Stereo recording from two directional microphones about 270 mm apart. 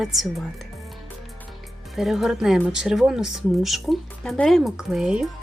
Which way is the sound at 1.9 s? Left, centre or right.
Centre.